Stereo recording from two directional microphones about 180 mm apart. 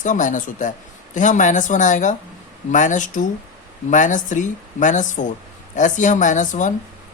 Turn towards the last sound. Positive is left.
turn(degrees=45)  # may be behind; listen again after turning